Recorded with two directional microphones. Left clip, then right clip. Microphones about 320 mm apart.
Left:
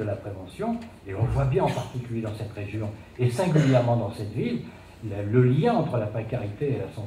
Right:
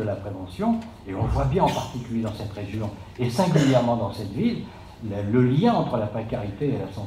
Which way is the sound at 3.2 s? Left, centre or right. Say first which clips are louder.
Right 2 dB; right.